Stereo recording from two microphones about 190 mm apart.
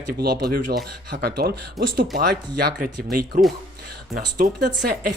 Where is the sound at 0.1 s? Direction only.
55° right (ahead or behind).